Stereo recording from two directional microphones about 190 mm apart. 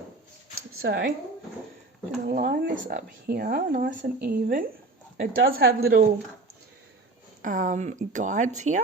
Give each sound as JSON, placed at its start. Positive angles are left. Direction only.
{"t": 0.8, "sound": "speech", "side_deg": -60}
{"t": 2.2, "sound": "speech", "side_deg": -55}
{"t": 5.2, "sound": "speech", "side_deg": -70}
{"t": 5.5, "sound": "speech", "side_deg": -55}
{"t": 7.4, "sound": "a woman's voice", "side_deg": -45}